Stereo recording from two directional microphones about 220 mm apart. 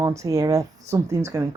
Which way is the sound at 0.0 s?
15° right (ahead or behind).